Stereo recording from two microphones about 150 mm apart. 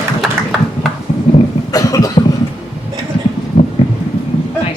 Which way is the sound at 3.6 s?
50° left (ahead or behind).